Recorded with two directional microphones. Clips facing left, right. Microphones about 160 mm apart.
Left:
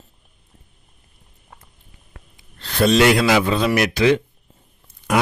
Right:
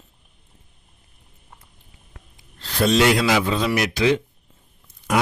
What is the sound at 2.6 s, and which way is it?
A man's voice, 60° left (ahead or behind).